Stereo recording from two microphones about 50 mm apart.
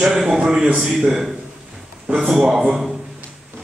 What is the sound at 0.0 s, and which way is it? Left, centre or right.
A man's voice, centre.